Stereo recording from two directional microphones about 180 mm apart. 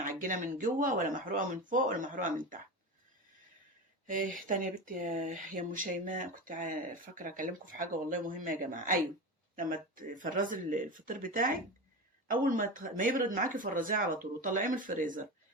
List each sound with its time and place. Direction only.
0.0 s speech: 45° right (ahead or behind)
4.0 s speech: 50° right (ahead or behind)